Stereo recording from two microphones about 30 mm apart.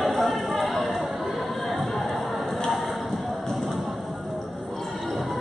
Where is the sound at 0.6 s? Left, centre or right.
Centre.